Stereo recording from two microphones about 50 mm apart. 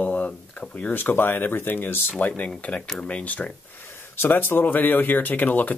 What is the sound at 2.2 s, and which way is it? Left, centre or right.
Speech, left.